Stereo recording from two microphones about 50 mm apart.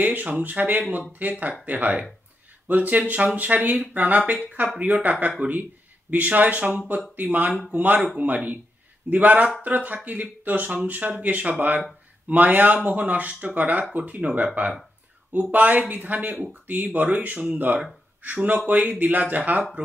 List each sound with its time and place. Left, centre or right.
0.0 s speech: right